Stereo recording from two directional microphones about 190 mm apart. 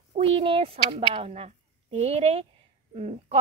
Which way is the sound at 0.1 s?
30° right (ahead or behind).